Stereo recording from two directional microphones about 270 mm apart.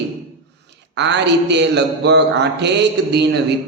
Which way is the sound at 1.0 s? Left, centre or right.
Right.